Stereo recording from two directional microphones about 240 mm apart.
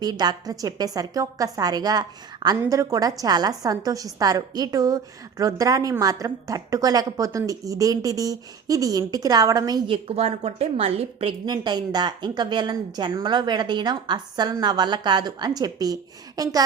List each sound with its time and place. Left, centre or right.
0.0 s a woman's voice: centre